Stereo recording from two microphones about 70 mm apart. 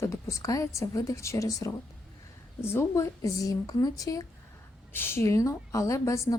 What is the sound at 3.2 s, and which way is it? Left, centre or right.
Speech, left.